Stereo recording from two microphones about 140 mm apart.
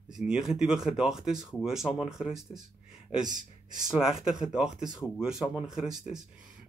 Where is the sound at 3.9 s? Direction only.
5° right (ahead or behind).